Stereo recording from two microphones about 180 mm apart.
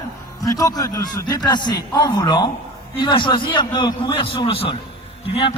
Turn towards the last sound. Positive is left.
turn(degrees=30)  # may be behind; listen again after turning